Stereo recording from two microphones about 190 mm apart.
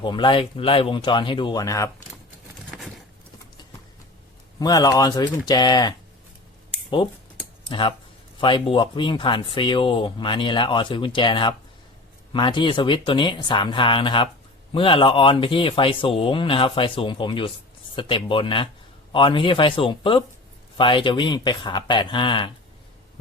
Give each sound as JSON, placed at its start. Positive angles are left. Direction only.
{"t": 0.0, "sound": "speech", "side_deg": 25}
{"t": 2.6, "sound": "a sound", "side_deg": 0}
{"t": 4.6, "sound": "speech", "side_deg": 20}
{"t": 7.7, "sound": "speech", "side_deg": 25}